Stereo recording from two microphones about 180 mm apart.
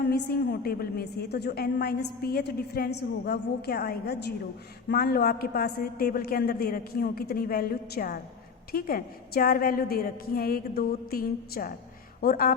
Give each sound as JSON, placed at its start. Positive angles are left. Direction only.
{"t": 0.0, "sound": "a woman's voice", "side_deg": 65}